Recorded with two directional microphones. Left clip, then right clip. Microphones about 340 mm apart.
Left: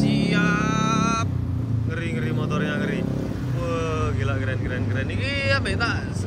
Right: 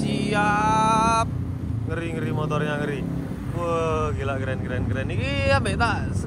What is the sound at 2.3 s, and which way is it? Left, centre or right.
Vehicle, centre.